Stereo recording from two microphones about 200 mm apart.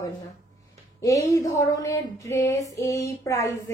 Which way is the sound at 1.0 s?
15° left (ahead or behind).